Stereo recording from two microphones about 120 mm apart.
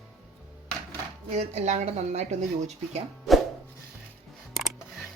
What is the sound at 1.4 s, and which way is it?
Speech, 70° right (ahead or behind).